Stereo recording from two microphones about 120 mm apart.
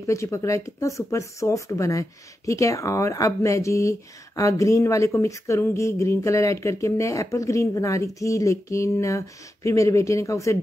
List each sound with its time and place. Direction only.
0.0 s speech: 25° left (ahead or behind)